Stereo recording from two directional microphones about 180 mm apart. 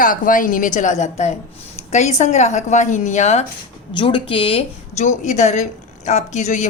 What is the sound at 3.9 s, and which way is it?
A woman's voice, 30° left (ahead or behind).